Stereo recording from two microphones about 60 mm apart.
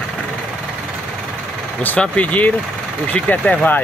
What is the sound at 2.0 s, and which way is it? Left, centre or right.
Speech, left.